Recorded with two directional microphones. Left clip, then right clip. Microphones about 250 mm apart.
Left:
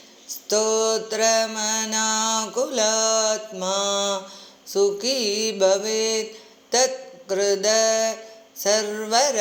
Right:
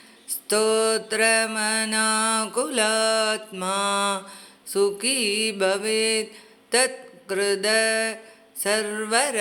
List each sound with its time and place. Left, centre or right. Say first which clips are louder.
0.4 s mantra: even; centre
6.7 s a sound: left 2 dB; centre
8.6 s mantra: left 3 dB; centre